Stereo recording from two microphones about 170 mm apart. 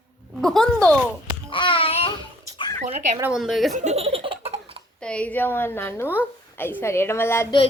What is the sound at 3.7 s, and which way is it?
Laughter, 45° right (ahead or behind).